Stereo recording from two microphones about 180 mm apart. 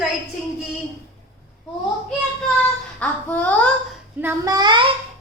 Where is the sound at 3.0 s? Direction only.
10° left (ahead or behind).